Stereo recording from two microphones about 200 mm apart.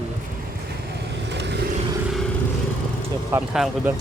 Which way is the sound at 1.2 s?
60° right (ahead or behind).